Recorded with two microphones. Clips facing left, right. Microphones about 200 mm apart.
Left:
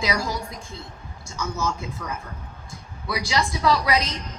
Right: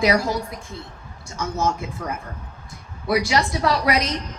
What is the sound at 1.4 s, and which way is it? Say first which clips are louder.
Speech: right 4 dB; 55° right (ahead or behind).